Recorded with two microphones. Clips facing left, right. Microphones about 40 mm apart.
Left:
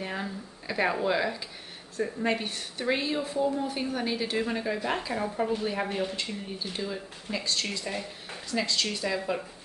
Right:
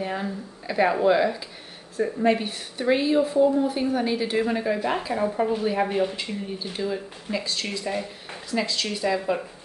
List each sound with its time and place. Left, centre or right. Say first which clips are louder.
0.0 s a woman's voice: right 5 dB; centre